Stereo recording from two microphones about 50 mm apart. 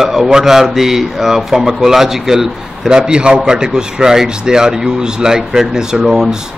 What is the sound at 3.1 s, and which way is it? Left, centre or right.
A man's voice, centre.